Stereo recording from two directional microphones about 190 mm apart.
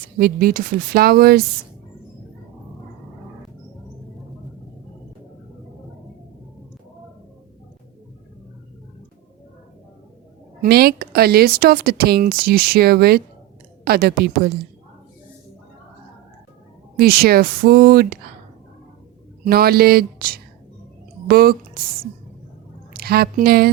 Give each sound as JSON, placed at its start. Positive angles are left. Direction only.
{"t": 0.2, "sound": "speech", "side_deg": -50}
{"t": 10.6, "sound": "a woman's voice", "side_deg": -55}
{"t": 17.0, "sound": "speech", "side_deg": -55}
{"t": 19.5, "sound": "speech", "side_deg": -55}
{"t": 22.9, "sound": "speech", "side_deg": -55}